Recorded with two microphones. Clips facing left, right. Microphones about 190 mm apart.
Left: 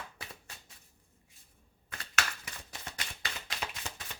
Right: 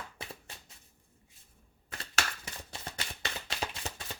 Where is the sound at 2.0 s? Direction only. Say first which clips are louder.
Even; 30° right (ahead or behind).